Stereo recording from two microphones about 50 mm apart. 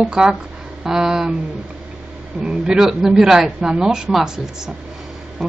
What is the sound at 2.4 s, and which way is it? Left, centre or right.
Speech, centre.